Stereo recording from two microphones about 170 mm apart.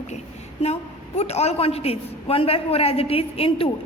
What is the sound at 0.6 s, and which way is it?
A man's voice, 40° left (ahead or behind).